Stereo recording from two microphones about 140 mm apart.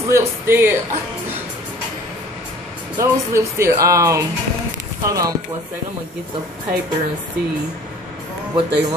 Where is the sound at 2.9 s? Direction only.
20° right (ahead or behind).